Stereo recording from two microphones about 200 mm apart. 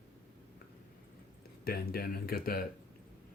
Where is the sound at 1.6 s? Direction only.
50° left (ahead or behind).